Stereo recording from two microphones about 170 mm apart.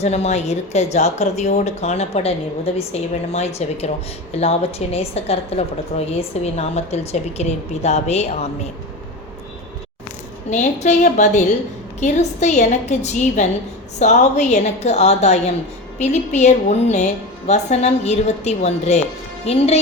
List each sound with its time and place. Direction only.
0.0 s speech: 40° left (ahead or behind)
10.5 s a woman's voice: 40° left (ahead or behind)